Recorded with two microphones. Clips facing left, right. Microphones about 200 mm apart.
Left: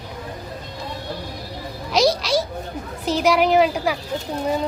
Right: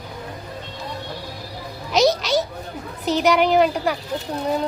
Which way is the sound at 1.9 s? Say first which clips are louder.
Right 1 dB; centre (ahead or behind).